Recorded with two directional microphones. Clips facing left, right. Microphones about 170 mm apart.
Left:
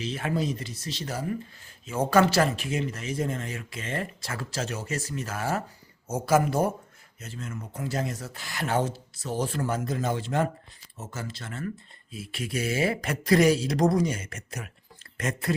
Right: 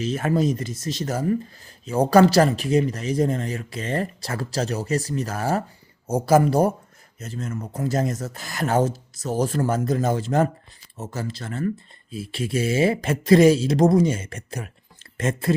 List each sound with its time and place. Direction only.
0.0 s speech: 45° right (ahead or behind); by 15.5 s 25° right (ahead or behind)